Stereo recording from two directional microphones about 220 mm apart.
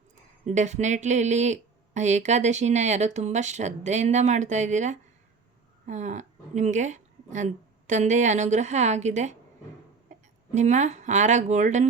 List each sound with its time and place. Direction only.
0.4 s a woman's voice: 30° right (ahead or behind)
10.1 s a sound: 35° right (ahead or behind)
10.5 s speech: 30° right (ahead or behind)